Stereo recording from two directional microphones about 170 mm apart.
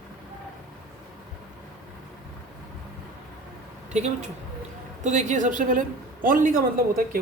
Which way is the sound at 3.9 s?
40° right (ahead or behind).